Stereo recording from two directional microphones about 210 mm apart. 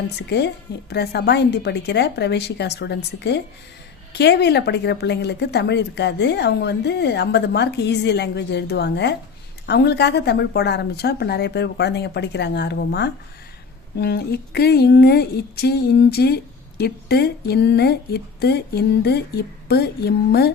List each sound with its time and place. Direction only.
0.2 s speech: 50° left (ahead or behind)